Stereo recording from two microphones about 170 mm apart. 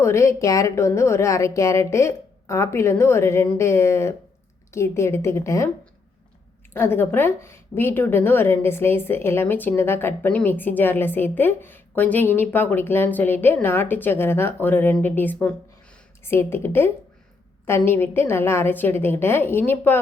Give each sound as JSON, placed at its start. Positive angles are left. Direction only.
{"t": 0.0, "sound": "a woman's voice", "side_deg": 15}
{"t": 6.7, "sound": "a woman's voice", "side_deg": 15}